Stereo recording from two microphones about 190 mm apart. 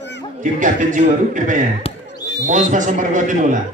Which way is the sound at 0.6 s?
40° right (ahead or behind).